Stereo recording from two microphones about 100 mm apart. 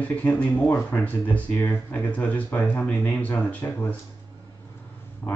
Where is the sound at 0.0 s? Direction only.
15° left (ahead or behind).